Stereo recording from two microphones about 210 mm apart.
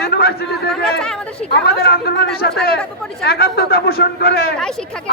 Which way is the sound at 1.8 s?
50° left (ahead or behind).